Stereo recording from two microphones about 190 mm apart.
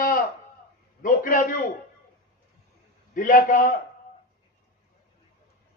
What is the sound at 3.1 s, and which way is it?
Speech, 45° left (ahead or behind).